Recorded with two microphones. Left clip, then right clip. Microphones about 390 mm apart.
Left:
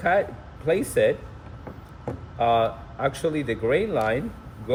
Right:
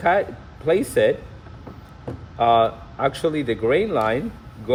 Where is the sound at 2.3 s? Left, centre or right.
Right.